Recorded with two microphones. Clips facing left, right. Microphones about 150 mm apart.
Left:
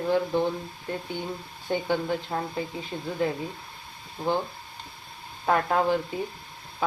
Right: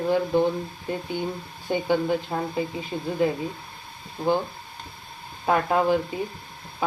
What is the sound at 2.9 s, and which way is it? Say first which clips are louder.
Speech: right 4 dB; 20° right (ahead or behind).